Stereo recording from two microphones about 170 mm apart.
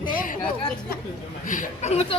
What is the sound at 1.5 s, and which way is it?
Speech, 45° left (ahead or behind).